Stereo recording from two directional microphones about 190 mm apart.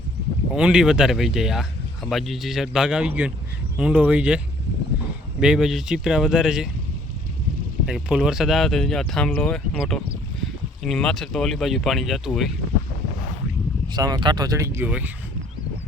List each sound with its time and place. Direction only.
0.5 s speech: 5° right (ahead or behind)
5.4 s speech: 5° right (ahead or behind)
7.9 s speech: 5° right (ahead or behind)
13.8 s speech: 20° right (ahead or behind)